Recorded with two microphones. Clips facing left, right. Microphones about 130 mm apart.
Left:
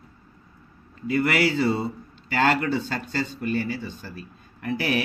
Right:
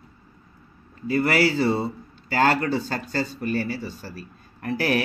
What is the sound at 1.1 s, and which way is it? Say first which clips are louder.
A man's voice: right 1 dB; 30° right (ahead or behind).